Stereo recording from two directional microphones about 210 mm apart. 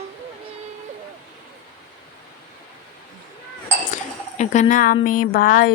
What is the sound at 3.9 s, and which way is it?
Dishes, 35° left (ahead or behind).